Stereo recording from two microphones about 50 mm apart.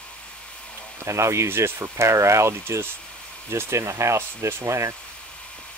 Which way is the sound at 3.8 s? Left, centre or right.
Right.